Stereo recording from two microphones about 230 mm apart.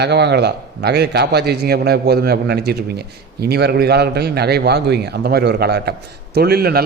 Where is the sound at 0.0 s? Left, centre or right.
Right.